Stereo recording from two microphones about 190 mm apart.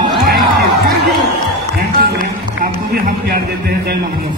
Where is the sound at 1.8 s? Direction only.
50° right (ahead or behind).